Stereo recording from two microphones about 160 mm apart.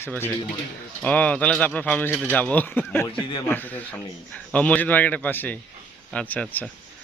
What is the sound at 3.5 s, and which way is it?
Speech, 10° left (ahead or behind).